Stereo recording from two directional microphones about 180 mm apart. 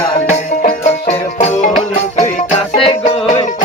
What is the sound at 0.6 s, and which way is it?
Music, 40° left (ahead or behind).